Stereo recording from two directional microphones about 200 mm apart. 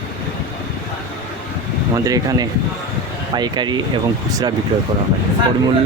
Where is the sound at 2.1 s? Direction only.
20° right (ahead or behind).